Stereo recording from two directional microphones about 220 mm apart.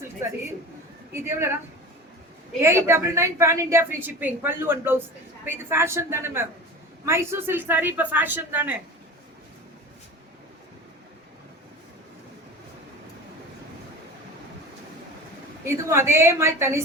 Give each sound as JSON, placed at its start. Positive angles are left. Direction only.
{"t": 0.2, "sound": "a woman's voice", "side_deg": -10}
{"t": 2.6, "sound": "a woman's voice", "side_deg": -10}
{"t": 15.6, "sound": "a woman's voice", "side_deg": -10}